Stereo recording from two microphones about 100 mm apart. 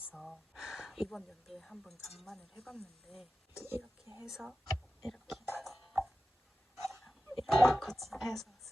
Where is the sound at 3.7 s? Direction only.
25° right (ahead or behind).